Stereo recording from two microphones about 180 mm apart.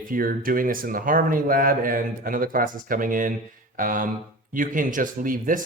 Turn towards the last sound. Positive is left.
turn(degrees=-50)  # may be behind; listen again after turning